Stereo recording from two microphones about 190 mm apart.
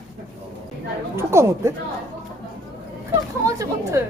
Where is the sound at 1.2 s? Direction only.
15° right (ahead or behind).